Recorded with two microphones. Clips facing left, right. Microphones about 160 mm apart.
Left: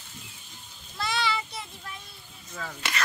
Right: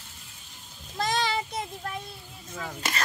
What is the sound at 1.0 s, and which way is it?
Child singing, 45° right (ahead or behind).